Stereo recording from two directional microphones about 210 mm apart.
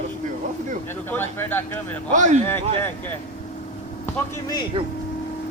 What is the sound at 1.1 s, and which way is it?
Speech, 10° left (ahead or behind).